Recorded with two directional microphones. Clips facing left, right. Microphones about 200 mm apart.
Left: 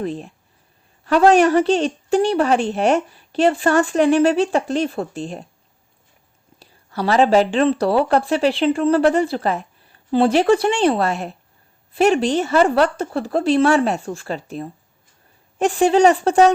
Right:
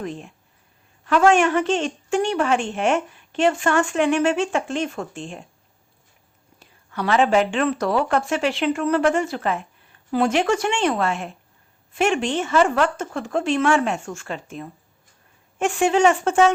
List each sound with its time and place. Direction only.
0.0 s speech: 35° left (ahead or behind)
6.6 s speech: 35° left (ahead or behind)